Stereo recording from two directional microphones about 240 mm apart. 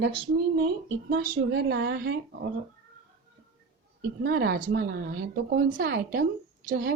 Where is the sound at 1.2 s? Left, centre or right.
Right.